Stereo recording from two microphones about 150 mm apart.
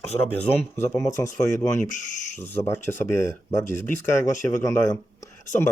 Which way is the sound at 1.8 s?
60° left (ahead or behind).